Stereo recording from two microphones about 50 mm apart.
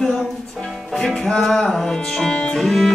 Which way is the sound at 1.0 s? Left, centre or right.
Centre.